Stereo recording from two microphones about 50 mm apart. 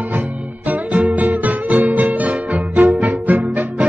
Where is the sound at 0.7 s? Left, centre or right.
Right.